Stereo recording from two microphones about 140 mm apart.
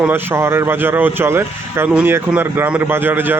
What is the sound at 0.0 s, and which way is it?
Speech, 15° right (ahead or behind).